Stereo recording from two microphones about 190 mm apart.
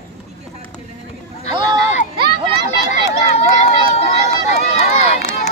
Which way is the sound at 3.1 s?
35° left (ahead or behind).